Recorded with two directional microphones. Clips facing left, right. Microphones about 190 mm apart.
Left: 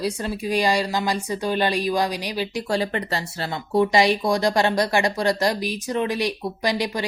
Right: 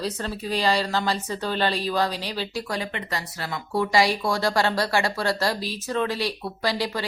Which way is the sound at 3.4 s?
25° left (ahead or behind).